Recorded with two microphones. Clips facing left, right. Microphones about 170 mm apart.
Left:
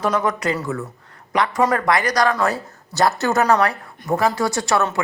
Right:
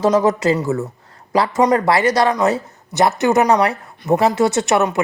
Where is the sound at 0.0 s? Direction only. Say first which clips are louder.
Right 6 dB; 25° right (ahead or behind).